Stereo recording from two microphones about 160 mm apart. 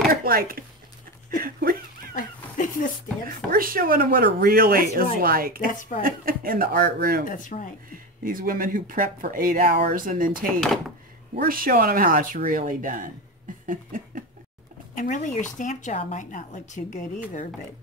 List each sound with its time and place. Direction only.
0.1 s speech: 65° right (ahead or behind)
2.1 s dog: 55° left (ahead or behind)
3.3 s speech: 65° right (ahead or behind)
5.7 s speech: 55° left (ahead or behind)
6.0 s speech: 65° right (ahead or behind)
7.2 s speech: 55° left (ahead or behind)
7.9 s speech: 60° right (ahead or behind)
10.4 s speech: centre (ahead or behind)
11.3 s speech: 60° right (ahead or behind)
13.7 s a sound: 60° right (ahead or behind)
15.0 s speech: 55° left (ahead or behind)